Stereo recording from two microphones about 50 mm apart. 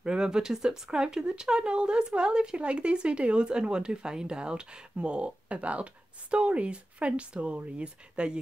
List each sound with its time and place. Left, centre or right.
0.0 s speech: centre